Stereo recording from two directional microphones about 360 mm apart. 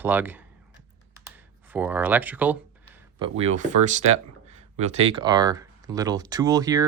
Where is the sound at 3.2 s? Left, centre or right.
Centre.